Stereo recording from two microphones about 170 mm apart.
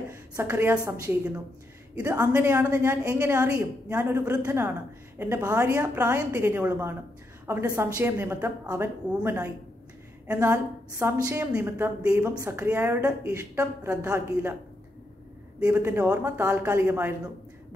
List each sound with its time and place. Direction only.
0.1 s a woman's voice: 15° right (ahead or behind)
15.6 s a woman's voice: 15° right (ahead or behind)